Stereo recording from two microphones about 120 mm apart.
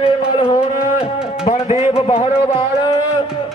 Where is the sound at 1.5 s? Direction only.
65° left (ahead or behind).